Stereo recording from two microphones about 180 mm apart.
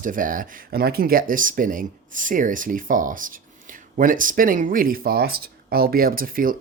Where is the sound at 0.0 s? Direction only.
50° right (ahead or behind).